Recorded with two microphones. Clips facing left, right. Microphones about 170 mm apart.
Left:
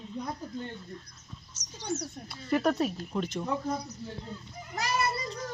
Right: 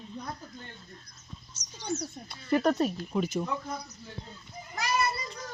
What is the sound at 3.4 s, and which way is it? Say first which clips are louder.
Speech: left 3 dB; 30° left (ahead or behind).